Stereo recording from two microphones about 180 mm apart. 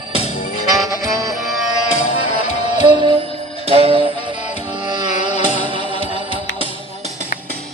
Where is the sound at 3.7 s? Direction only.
30° right (ahead or behind).